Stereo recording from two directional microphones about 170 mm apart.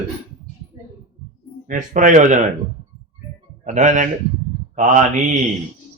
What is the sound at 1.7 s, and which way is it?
Speech, 50° right (ahead or behind).